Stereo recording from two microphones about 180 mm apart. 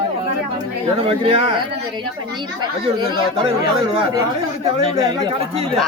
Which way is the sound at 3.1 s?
25° right (ahead or behind).